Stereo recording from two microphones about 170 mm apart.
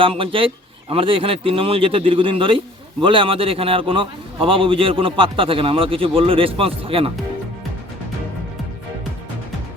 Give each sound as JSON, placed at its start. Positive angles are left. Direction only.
{"t": 0.0, "sound": "a man's voice", "side_deg": -30}